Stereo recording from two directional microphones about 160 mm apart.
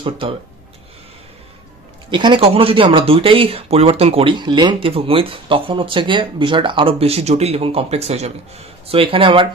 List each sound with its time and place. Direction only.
2.0 s speech: 30° right (ahead or behind)